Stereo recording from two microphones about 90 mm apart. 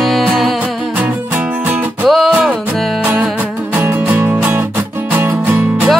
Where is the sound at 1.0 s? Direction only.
20° right (ahead or behind).